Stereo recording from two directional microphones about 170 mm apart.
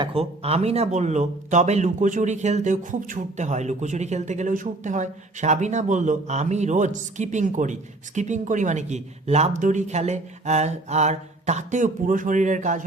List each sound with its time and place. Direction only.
0.0 s speech: 35° right (ahead or behind)